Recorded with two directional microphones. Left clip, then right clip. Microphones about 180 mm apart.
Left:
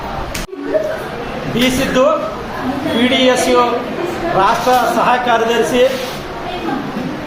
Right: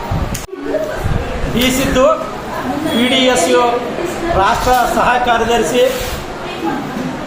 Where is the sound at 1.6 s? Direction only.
Centre (ahead or behind).